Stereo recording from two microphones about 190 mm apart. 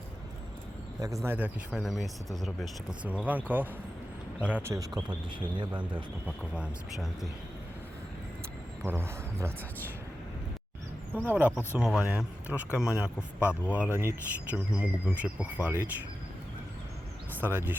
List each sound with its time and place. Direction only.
1.0 s speech: 15° right (ahead or behind)
6.2 s speech: 5° right (ahead or behind)
8.8 s speech: 15° right (ahead or behind)
11.3 s speech: 10° right (ahead or behind)
17.4 s speech: 10° right (ahead or behind)